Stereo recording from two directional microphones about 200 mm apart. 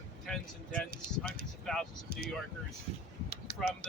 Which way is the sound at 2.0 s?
50° right (ahead or behind).